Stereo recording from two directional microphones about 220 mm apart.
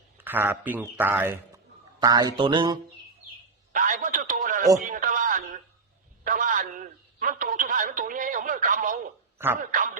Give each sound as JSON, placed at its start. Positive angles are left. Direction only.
{"t": 0.2, "sound": "speech", "side_deg": -10}
{"t": 3.7, "sound": "a sound", "side_deg": -35}
{"t": 9.6, "sound": "a man's voice", "side_deg": -35}